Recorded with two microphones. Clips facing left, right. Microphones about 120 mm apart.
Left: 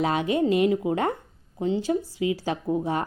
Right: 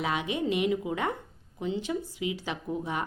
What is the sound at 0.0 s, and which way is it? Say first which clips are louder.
Speech: left 7 dB; 40° left (ahead or behind).